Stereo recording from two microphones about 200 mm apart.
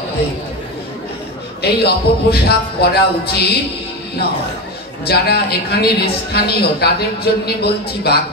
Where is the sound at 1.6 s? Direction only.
55° left (ahead or behind).